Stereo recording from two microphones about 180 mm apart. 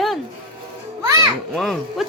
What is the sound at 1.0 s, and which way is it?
Speech, 15° right (ahead or behind).